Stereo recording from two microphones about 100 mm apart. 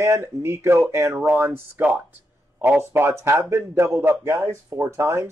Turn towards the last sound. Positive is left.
turn(degrees=-25)  # may be behind; listen again after turning